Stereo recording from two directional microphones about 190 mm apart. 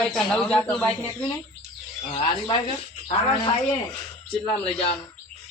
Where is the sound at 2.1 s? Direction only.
25° left (ahead or behind).